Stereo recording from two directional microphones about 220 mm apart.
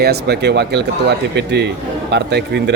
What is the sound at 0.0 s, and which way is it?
A man's voice, 45° right (ahead or behind).